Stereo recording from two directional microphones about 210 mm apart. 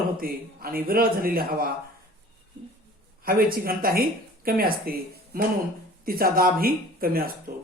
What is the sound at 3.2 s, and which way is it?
Speech, 45° right (ahead or behind).